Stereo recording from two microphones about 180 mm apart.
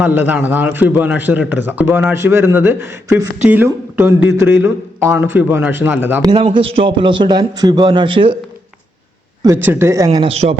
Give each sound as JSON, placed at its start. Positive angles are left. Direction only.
{"t": 0.0, "sound": "a man's voice", "side_deg": -10}
{"t": 6.3, "sound": "a man's voice", "side_deg": -30}
{"t": 9.4, "sound": "a man's voice", "side_deg": -15}
{"t": 10.1, "sound": "speech", "side_deg": -30}